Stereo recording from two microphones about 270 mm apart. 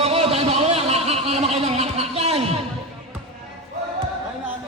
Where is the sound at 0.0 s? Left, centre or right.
Right.